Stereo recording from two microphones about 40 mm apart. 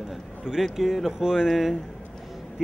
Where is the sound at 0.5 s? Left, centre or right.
Centre.